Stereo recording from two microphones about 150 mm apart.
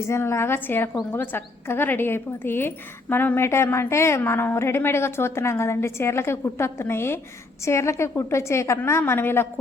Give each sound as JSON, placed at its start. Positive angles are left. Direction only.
{"t": 0.0, "sound": "a woman's voice", "side_deg": 15}